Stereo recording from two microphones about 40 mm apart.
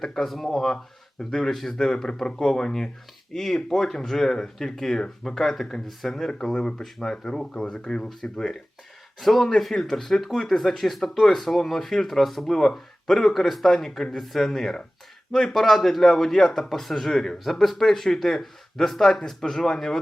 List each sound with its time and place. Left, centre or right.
0.0 s speech: centre